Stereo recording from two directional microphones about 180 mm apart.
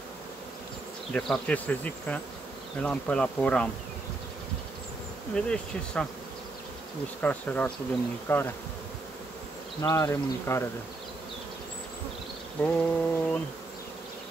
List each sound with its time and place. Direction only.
1.1 s speech: 5° left (ahead or behind)
2.8 s bee: 5° left (ahead or behind)
5.3 s bee: 5° left (ahead or behind)
7.2 s speech: 10° left (ahead or behind)
9.8 s speech: 15° left (ahead or behind)
12.6 s speech: 5° left (ahead or behind)